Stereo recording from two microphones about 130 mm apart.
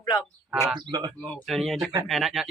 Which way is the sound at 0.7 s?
35° right (ahead or behind).